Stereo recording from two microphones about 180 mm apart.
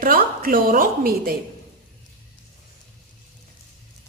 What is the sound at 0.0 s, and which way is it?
A woman's voice, 50° right (ahead or behind).